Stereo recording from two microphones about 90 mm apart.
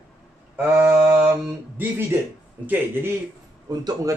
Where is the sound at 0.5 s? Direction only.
20° right (ahead or behind).